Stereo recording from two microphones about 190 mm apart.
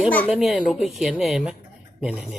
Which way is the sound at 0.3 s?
Centre (ahead or behind).